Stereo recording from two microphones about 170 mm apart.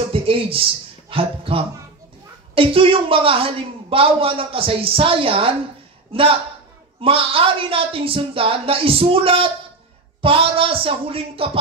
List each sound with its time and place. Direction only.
0.1 s a man's voice: 35° right (ahead or behind)